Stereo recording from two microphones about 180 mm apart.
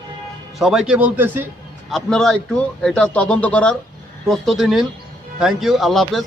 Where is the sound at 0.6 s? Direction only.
Centre (ahead or behind).